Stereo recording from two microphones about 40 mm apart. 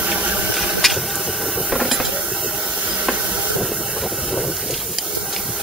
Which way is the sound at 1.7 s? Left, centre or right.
Centre.